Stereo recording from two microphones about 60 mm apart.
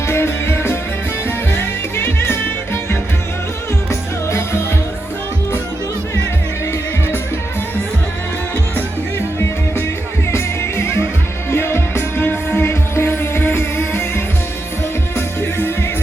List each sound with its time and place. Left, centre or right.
0.1 s music: left
3.8 s music: left
8.7 s music: left
15.1 s music: left